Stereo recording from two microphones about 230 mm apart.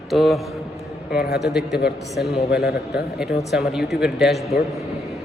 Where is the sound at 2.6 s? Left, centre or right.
Left.